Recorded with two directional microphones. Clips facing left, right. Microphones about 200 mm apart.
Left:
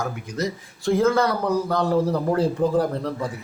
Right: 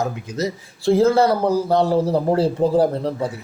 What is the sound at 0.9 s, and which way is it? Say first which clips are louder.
A man's voice: right 4 dB; 30° right (ahead or behind).